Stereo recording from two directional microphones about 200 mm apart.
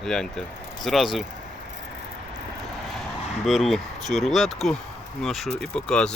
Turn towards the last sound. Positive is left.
turn(degrees=5)  # may be behind; listen again after turning